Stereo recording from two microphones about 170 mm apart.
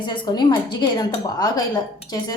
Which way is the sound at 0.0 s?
30° left (ahead or behind).